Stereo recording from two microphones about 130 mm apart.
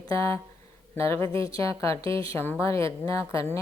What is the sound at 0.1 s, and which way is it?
A woman's voice, 25° left (ahead or behind).